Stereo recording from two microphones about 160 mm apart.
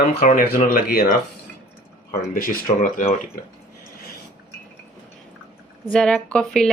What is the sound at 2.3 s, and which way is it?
Speech, 60° left (ahead or behind).